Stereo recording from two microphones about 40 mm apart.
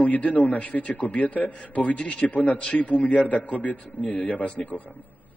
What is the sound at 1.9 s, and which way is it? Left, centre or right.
Speech, left.